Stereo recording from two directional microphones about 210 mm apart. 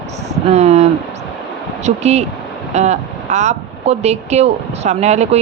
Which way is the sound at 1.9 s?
30° right (ahead or behind).